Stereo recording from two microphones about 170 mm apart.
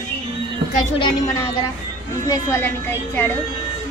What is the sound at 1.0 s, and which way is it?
A woman's voice, 30° left (ahead or behind).